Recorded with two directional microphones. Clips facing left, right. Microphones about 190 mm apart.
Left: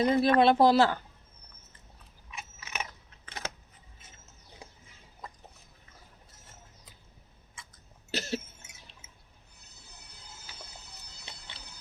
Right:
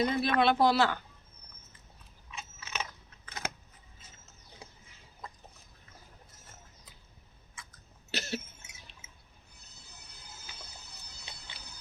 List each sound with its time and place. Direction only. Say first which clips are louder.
0.0 s speech: left 5 dB; 35° left (ahead or behind)
2.3 s biting: even; 15° left (ahead or behind)
8.1 s cough: left 3 dB; 35° left (ahead or behind)